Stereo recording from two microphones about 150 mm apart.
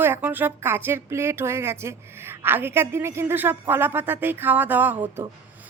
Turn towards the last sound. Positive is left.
turn(degrees=-15)  # may be behind; listen again after turning